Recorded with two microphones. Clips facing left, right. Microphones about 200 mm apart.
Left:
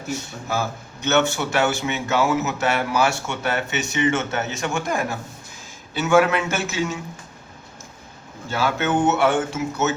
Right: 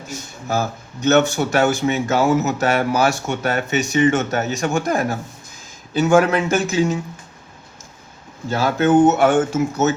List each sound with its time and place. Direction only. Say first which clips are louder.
0.4 s speech: right 5 dB; 40° right (ahead or behind)
8.4 s speech: right 6 dB; 40° right (ahead or behind)